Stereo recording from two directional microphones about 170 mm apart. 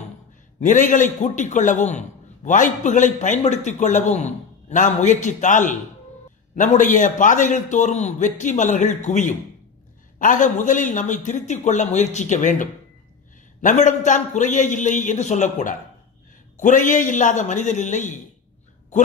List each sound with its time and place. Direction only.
0.6 s a man's voice: 50° left (ahead or behind)